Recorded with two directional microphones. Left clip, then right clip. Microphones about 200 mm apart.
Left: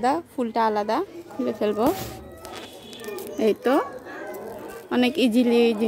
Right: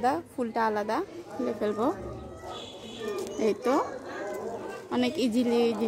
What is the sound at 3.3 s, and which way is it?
Speech, 35° left (ahead or behind).